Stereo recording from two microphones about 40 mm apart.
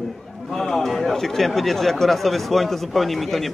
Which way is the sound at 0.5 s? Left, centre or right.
Centre.